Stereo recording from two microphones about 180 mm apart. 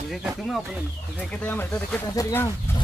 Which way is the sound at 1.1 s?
10° left (ahead or behind).